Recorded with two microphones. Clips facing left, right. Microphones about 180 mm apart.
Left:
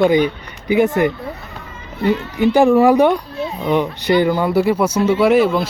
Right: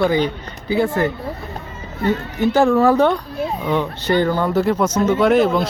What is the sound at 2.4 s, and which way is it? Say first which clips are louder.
Speech: left 3 dB; 15° left (ahead or behind).